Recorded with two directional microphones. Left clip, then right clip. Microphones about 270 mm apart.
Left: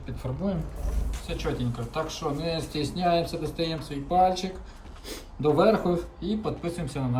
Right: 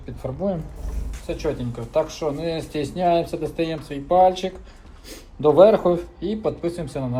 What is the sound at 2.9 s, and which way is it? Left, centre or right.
Speech, right.